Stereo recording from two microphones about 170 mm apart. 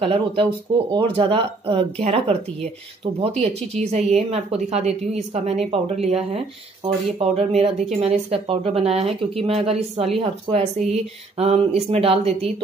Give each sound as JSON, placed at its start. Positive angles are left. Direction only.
{"t": 0.0, "sound": "speech", "side_deg": -30}
{"t": 7.3, "sound": "speech", "side_deg": -40}